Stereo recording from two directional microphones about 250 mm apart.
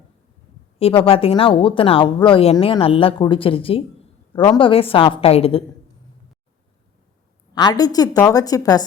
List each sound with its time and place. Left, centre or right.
0.8 s speech: left
7.5 s a woman's voice: centre